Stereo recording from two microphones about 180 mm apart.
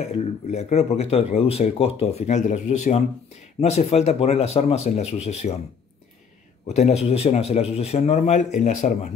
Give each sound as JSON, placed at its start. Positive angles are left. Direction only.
{"t": 0.1, "sound": "speech", "side_deg": 40}
{"t": 6.7, "sound": "speech", "side_deg": 35}